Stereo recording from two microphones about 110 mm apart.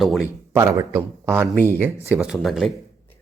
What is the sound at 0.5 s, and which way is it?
Speech, 30° right (ahead or behind).